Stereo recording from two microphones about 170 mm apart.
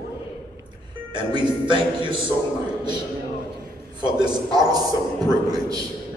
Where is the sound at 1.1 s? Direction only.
25° right (ahead or behind).